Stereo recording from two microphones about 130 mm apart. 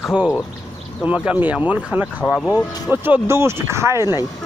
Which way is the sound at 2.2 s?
10° left (ahead or behind).